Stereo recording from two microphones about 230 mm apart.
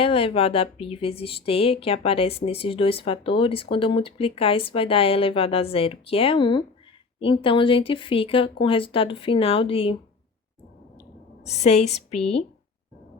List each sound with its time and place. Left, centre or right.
0.0 s speech: left
11.4 s speech: left